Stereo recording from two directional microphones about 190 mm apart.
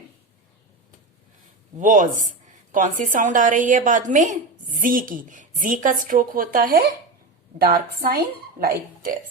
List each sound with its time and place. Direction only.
1.8 s a woman's voice: 45° right (ahead or behind)